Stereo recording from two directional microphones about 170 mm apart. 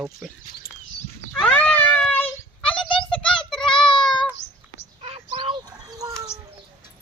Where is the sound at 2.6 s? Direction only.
30° left (ahead or behind).